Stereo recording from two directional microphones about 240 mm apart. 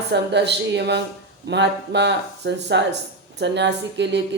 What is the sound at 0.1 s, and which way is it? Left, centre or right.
Speech, right.